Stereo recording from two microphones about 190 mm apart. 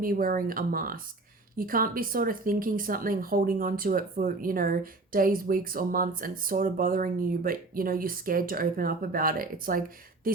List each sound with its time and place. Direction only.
0.0 s speech: 50° right (ahead or behind)